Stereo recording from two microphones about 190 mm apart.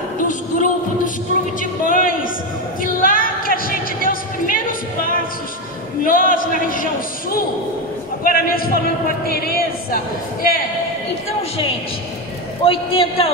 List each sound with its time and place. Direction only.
0.2 s music: 45° left (ahead or behind)
1.6 s a sound: 45° left (ahead or behind)
6.0 s a man's voice: 45° left (ahead or behind)
12.6 s a man's voice: 30° left (ahead or behind)